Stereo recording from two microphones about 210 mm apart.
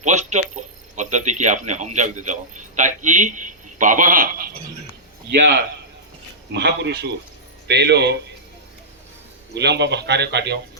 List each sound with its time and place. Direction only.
0.0 s a sound: 35° right (ahead or behind)
5.3 s a man's voice: 50° right (ahead or behind)
9.6 s speech: 55° right (ahead or behind)